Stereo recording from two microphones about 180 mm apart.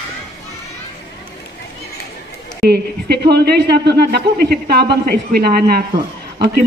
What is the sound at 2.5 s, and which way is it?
A man's voice, 65° right (ahead or behind).